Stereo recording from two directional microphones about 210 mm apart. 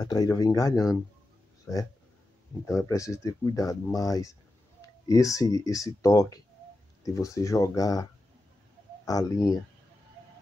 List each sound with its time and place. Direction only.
0.0 s speech: 20° left (ahead or behind)
1.7 s speech: centre (ahead or behind)
2.9 s speech: 15° left (ahead or behind)